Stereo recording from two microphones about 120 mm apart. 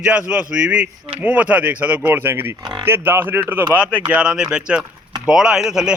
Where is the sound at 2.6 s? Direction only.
40° right (ahead or behind).